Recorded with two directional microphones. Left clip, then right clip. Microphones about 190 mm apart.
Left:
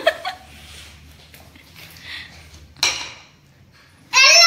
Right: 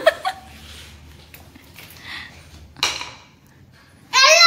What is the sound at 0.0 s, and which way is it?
Chuckle, 25° right (ahead or behind).